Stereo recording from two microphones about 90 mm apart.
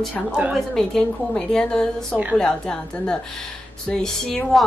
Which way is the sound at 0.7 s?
10° left (ahead or behind).